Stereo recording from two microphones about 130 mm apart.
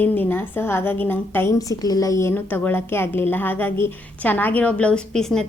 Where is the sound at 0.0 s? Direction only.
15° left (ahead or behind).